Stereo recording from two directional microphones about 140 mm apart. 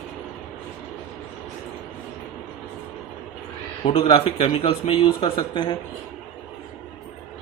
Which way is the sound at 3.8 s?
40° left (ahead or behind).